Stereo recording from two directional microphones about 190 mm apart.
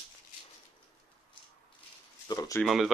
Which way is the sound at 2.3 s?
20° left (ahead or behind).